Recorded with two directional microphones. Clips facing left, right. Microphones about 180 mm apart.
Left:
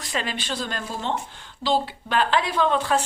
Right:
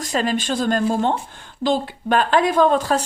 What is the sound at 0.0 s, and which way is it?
A woman's voice, 45° right (ahead or behind).